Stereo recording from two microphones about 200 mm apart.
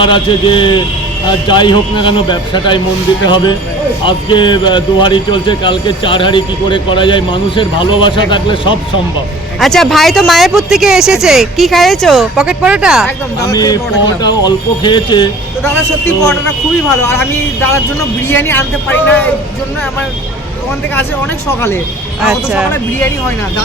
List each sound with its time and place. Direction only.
0.0 s speech: 25° left (ahead or behind)
9.6 s speech: centre (ahead or behind)
13.1 s speech: 15° left (ahead or behind)
17.0 s speech: 10° left (ahead or behind)
22.2 s speech: 5° right (ahead or behind)
22.7 s speech: 10° left (ahead or behind)